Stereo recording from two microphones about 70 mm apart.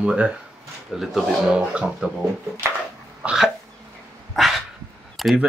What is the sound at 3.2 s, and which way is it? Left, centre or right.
Cough, centre.